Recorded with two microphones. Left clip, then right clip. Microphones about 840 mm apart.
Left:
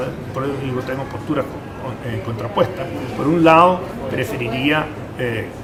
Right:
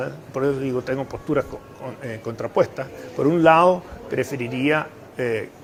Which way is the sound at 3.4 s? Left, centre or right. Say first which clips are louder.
Left 4 dB; right.